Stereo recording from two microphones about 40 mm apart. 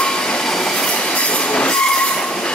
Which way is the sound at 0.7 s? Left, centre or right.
Left.